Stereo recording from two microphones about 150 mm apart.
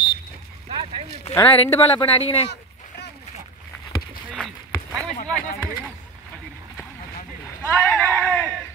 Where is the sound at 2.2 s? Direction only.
45° left (ahead or behind).